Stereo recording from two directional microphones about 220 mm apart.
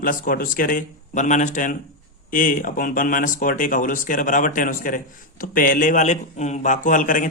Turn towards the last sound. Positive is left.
turn(degrees=35)  # may be behind; listen again after turning